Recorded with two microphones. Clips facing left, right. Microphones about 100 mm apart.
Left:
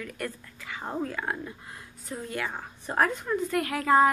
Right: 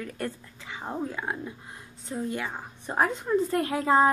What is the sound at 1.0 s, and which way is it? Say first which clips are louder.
A woman's voice: even; 15° right (ahead or behind).